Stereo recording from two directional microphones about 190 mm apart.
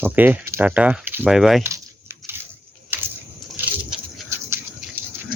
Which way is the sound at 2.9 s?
10° right (ahead or behind).